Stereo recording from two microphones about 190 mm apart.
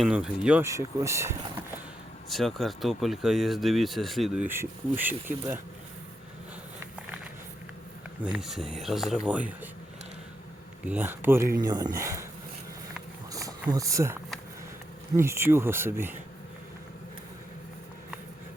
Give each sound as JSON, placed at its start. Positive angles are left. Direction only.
{"t": 0.0, "sound": "speech", "side_deg": -5}
{"t": 2.3, "sound": "speech", "side_deg": 0}
{"t": 4.4, "sound": "speech", "side_deg": -10}
{"t": 8.2, "sound": "speech", "side_deg": -5}
{"t": 10.8, "sound": "speech", "side_deg": -10}
{"t": 13.3, "sound": "a sound", "side_deg": -20}
{"t": 15.1, "sound": "speech", "side_deg": -15}